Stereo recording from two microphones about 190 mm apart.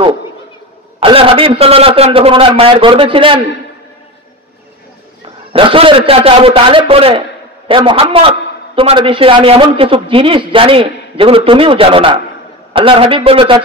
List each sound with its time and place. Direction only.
0.9 s a man's voice: 30° right (ahead or behind)
5.5 s a man's voice: 30° right (ahead or behind)